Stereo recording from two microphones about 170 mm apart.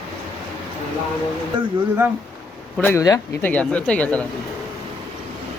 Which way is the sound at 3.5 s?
5° left (ahead or behind).